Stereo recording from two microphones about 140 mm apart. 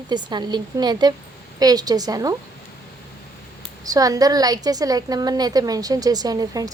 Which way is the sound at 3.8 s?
25° right (ahead or behind).